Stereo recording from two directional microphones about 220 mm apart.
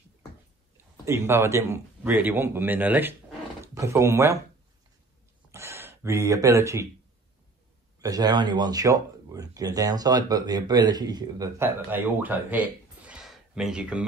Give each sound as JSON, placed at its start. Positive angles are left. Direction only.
{"t": 1.0, "sound": "speech", "side_deg": -10}
{"t": 5.5, "sound": "speech", "side_deg": -10}
{"t": 8.0, "sound": "speech", "side_deg": -15}